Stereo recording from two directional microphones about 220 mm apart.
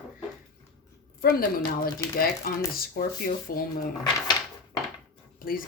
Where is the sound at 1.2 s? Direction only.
40° left (ahead or behind).